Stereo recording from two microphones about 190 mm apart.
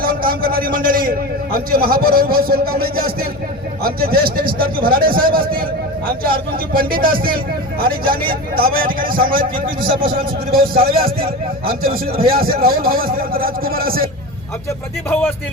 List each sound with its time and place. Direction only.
0.0 s a man's voice: 50° right (ahead or behind)
6.7 s a man's voice: 50° right (ahead or behind)